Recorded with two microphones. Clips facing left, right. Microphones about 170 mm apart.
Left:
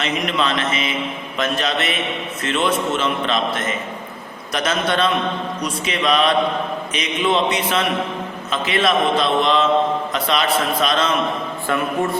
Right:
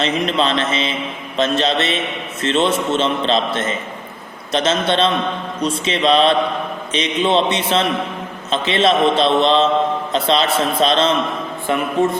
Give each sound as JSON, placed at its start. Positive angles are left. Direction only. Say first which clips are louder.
{"t": 0.0, "sound": "a man's voice", "louder": "right 3 dB", "side_deg": -30}